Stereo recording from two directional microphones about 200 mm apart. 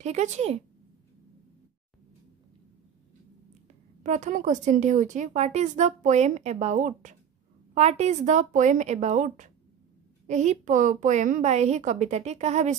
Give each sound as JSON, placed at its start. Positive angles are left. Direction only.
{"t": 0.0, "sound": "speech", "side_deg": -35}
{"t": 4.0, "sound": "speech", "side_deg": -40}